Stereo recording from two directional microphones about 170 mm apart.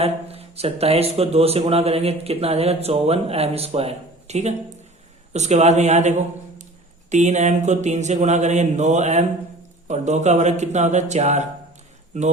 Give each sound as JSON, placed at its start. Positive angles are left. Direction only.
{"t": 0.0, "sound": "a man's voice", "side_deg": -35}